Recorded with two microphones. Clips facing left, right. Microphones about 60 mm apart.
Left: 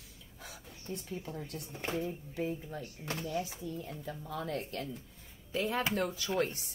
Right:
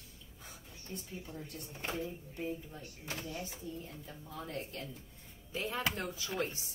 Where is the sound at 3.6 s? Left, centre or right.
Left.